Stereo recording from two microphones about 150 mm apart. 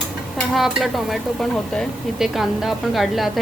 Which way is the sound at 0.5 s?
Centre (ahead or behind).